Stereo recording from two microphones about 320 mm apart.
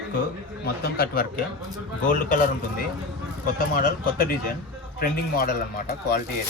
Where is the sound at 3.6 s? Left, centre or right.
Left.